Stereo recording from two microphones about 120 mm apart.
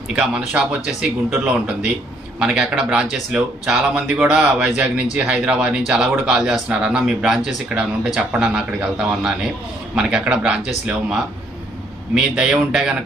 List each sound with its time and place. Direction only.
0.1 s speech: 5° right (ahead or behind)
12.1 s speech: 5° right (ahead or behind)